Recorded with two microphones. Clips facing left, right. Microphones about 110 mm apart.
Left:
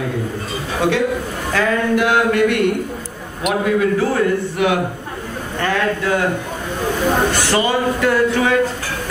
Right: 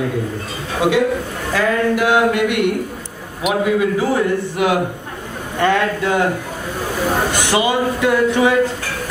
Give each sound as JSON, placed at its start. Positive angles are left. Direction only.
{"t": 0.7, "sound": "a man's voice", "side_deg": -10}
{"t": 7.3, "sound": "a man's voice", "side_deg": -15}